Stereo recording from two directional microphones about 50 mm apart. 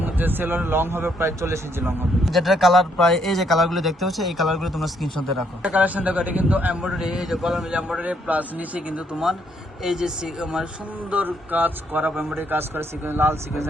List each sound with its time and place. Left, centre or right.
0.0 s speech: right
2.2 s speech: centre
3.0 s speech: centre
5.7 s a man's voice: right
6.8 s speech: centre
7.9 s a man's voice: right
9.8 s speech: centre
11.1 s a man's voice: right